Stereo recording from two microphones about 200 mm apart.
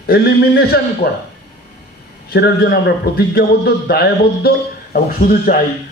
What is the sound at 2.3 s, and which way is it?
A man's voice, 50° left (ahead or behind).